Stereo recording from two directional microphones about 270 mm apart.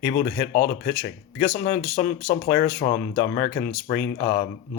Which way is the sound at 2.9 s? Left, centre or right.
Centre.